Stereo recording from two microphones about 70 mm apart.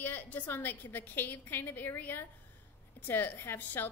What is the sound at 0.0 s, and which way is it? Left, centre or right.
A woman's voice, left.